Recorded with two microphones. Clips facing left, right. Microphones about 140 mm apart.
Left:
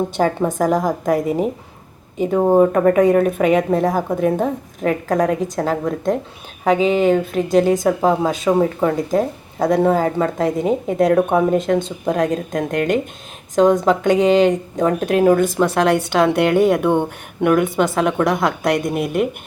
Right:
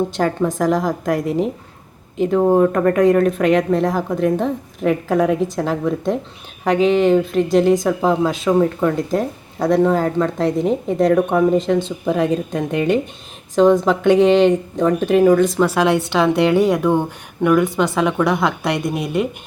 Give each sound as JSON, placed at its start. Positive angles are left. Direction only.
{"t": 0.2, "sound": "a woman's voice", "side_deg": 10}